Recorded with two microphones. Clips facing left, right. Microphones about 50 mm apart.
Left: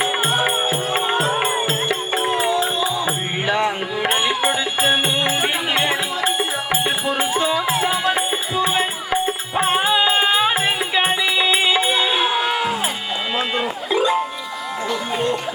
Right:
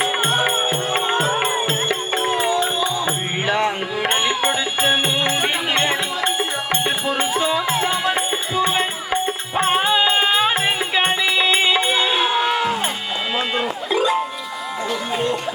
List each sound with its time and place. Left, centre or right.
0.0 s music: centre